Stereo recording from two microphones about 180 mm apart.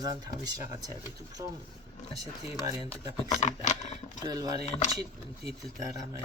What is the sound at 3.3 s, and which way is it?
Speech, 40° left (ahead or behind).